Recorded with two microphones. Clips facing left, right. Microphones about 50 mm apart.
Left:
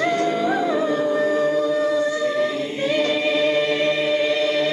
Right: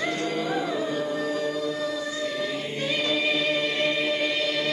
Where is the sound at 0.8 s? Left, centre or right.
Left.